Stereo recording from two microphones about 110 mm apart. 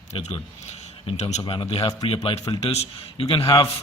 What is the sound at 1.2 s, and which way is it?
Speech, 90° left.